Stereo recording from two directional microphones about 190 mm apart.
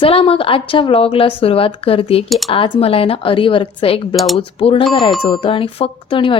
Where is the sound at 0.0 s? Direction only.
30° left (ahead or behind).